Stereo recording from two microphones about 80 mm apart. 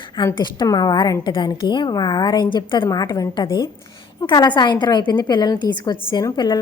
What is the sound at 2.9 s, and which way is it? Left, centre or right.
Speech, left.